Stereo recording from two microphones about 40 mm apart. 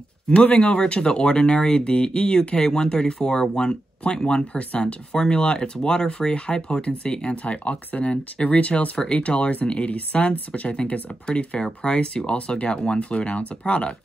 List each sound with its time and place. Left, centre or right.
0.6 s speech: left
4.6 s speech: left
7.5 s speech: left
9.9 s speech: left